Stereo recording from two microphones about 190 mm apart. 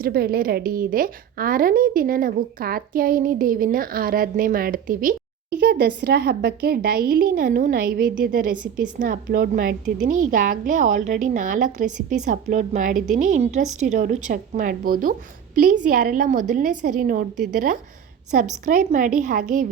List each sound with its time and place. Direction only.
0.0 s a woman's voice: 50° right (ahead or behind)
5.5 s a woman's voice: 60° right (ahead or behind); by 19.6 s 45° right (ahead or behind)